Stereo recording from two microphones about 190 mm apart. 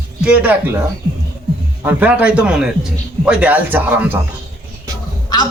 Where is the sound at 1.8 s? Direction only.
5° right (ahead or behind).